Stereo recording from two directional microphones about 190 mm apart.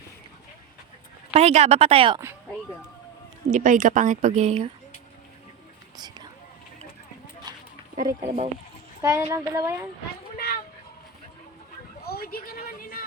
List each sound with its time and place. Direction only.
1.3 s speech: 35° right (ahead or behind)
3.5 s speech: 40° right (ahead or behind)
7.5 s a sound: 20° right (ahead or behind)
7.9 s speech: 45° right (ahead or behind)
9.0 s a woman's voice: 15° right (ahead or behind)
10.3 s children playing: 50° left (ahead or behind)
12.0 s a sound: 55° left (ahead or behind)